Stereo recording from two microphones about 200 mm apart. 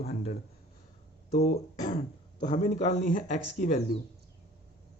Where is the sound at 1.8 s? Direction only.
40° left (ahead or behind).